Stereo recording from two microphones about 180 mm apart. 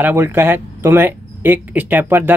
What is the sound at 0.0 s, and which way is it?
Speech, 10° right (ahead or behind).